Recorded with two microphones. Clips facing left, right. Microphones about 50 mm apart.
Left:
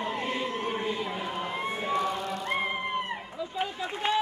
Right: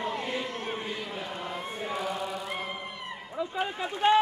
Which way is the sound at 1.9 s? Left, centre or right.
Centre.